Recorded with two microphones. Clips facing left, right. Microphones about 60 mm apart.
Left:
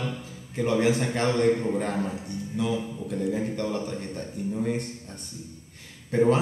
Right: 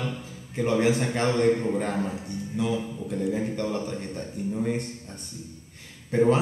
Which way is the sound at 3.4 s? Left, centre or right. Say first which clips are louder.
Even; centre.